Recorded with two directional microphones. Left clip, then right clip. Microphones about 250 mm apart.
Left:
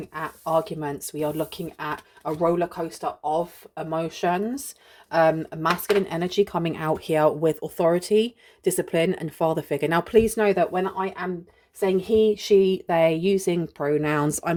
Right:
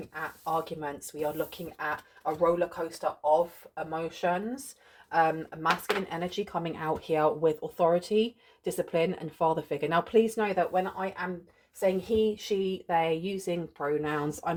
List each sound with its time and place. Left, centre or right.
0.1 s a woman's voice: left
2.4 s a woman's voice: left